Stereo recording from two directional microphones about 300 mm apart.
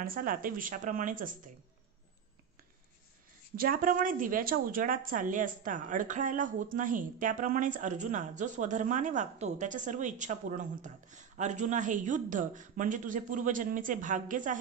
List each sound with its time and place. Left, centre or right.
0.0 s a woman's voice: right
3.5 s a woman's voice: right